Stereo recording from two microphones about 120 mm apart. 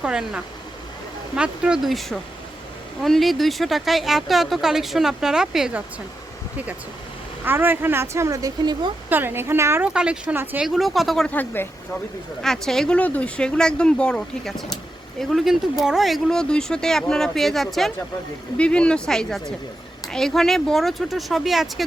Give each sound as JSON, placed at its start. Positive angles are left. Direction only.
{"t": 0.0, "sound": "speech", "side_deg": -5}
{"t": 7.4, "sound": "a woman's voice", "side_deg": -15}
{"t": 9.0, "sound": "a woman's voice", "side_deg": -15}
{"t": 9.8, "sound": "speech", "side_deg": -10}
{"t": 10.7, "sound": "speech", "side_deg": 0}
{"t": 11.3, "sound": "speech", "side_deg": 15}
{"t": 12.4, "sound": "speech", "side_deg": 5}